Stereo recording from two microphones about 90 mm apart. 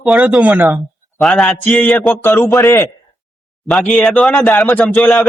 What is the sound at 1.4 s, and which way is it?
Speech, 15° left (ahead or behind).